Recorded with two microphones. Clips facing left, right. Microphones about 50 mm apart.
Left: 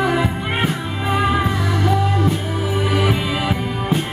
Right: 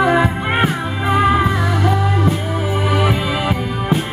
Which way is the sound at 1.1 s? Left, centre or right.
Centre.